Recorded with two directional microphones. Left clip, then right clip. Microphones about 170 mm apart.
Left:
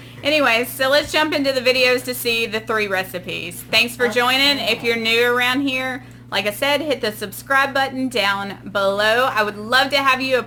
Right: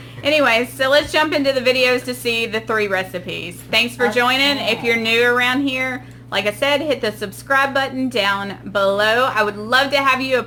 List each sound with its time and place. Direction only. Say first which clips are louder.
0.3 s a woman's voice: right 1 dB; 5° left (ahead or behind)